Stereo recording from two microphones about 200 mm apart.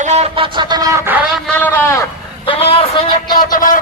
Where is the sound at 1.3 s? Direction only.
5° left (ahead or behind).